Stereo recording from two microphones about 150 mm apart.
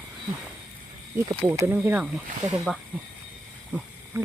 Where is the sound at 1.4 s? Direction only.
15° right (ahead or behind).